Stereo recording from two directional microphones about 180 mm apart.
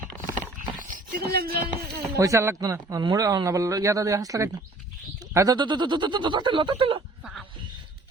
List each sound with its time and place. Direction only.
0.8 s speech: 45° right (ahead or behind)
2.0 s speech: 15° right (ahead or behind)